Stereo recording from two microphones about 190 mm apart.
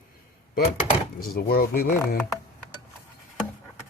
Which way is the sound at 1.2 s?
55° left (ahead or behind).